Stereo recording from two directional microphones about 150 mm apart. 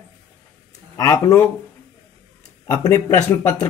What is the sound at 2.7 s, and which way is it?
Speech, 20° left (ahead or behind).